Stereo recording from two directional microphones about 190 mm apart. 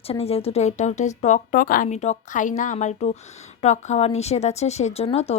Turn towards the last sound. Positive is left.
turn(degrees=30)  # may be behind; listen again after turning